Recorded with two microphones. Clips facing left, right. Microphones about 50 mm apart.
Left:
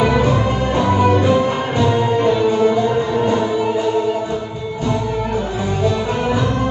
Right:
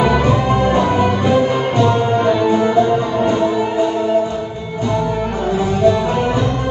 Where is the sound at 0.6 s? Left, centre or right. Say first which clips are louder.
Right 3 dB; right.